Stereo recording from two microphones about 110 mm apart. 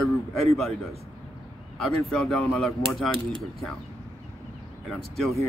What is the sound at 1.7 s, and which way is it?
Speech, 5° left (ahead or behind).